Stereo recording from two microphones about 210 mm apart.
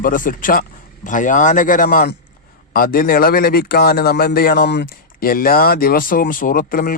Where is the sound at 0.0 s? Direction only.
40° left (ahead or behind).